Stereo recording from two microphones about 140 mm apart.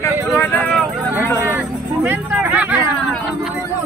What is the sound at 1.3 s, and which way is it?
Speech, 20° right (ahead or behind).